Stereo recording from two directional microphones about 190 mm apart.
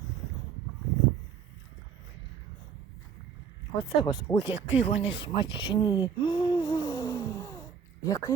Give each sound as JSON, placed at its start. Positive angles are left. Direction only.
{"t": 3.8, "sound": "speech", "side_deg": 25}